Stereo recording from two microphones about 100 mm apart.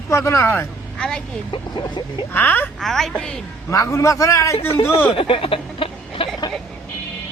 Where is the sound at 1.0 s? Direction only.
10° left (ahead or behind).